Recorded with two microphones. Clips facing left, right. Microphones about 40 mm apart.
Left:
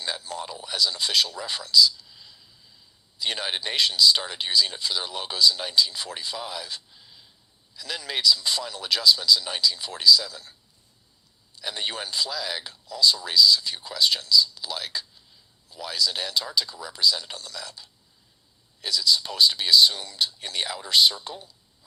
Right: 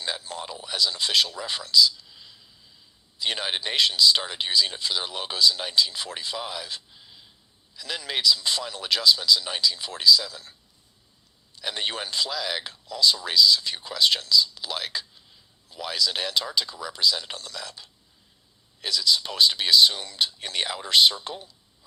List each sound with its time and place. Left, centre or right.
0.0 s a man's voice: centre
1.6 s speech: right
2.0 s a sound: right
3.2 s speech: centre
4.3 s speech: centre
4.9 s speech: right
11.6 s speech: right
12.1 s speech: right